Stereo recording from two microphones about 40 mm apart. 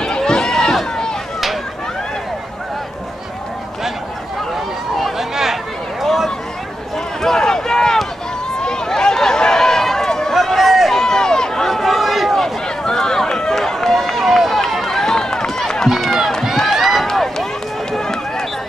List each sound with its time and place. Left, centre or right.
0.0 s run: centre
5.3 s a sound: centre
6.0 s a sound: centre
7.2 s a sound: centre
10.3 s run: centre
10.9 s run: centre
12.8 s run: centre
14.2 s run: centre
14.7 s run: centre
15.9 s run: centre